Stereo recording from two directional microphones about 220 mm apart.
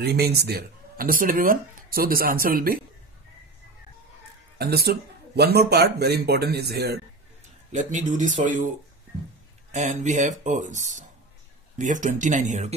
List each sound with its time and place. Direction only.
0.0 s speech: 45° right (ahead or behind)
4.6 s speech: 45° right (ahead or behind)
7.7 s speech: 35° right (ahead or behind)
9.7 s speech: 35° right (ahead or behind)